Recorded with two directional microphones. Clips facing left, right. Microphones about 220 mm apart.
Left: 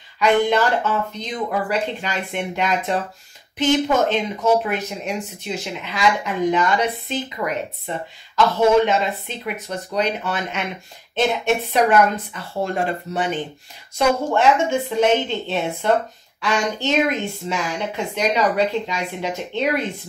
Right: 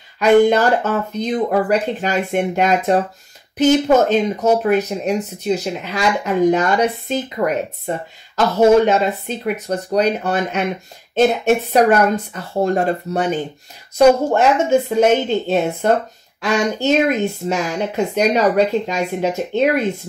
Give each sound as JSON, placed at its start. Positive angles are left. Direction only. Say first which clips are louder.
{"t": 0.2, "sound": "speech", "louder": "right 5 dB", "side_deg": -45}